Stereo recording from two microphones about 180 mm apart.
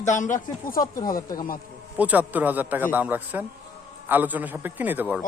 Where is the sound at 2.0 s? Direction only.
10° right (ahead or behind).